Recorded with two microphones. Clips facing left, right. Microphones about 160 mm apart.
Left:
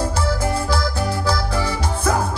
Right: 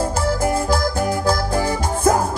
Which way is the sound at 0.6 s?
45° right (ahead or behind).